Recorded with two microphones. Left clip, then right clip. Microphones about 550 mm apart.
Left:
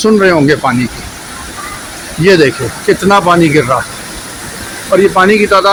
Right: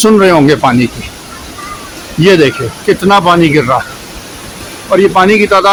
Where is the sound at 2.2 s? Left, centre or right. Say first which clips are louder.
Right 1 dB; right.